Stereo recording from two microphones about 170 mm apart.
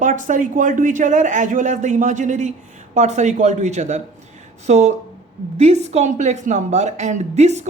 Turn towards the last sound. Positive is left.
turn(degrees=-40)  # may be behind; listen again after turning